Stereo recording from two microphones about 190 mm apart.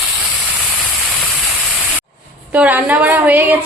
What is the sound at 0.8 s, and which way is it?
Static, centre (ahead or behind).